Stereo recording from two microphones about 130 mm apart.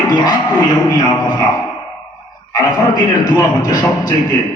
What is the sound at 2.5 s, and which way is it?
Speech, 30° left (ahead or behind).